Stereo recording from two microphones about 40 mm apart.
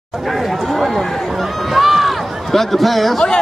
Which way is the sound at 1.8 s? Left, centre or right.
Centre.